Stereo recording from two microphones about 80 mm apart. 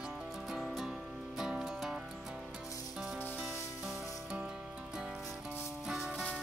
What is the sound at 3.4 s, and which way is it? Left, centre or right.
Music, centre.